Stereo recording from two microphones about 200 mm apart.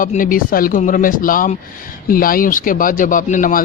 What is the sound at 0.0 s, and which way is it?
Speech, 40° left (ahead or behind).